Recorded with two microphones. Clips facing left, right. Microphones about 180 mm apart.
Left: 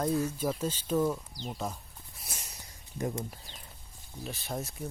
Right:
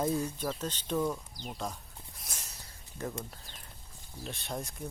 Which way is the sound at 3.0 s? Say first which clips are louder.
Left 4 dB; 15° left (ahead or behind).